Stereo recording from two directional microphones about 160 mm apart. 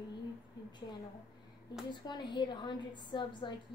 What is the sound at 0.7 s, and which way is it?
A woman's voice, 30° left (ahead or behind).